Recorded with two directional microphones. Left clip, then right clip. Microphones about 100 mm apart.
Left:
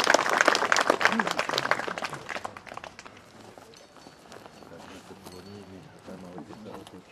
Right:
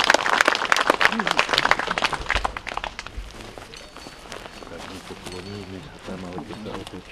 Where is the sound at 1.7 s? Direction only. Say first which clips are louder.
Right 6 dB; 20° left (ahead or behind).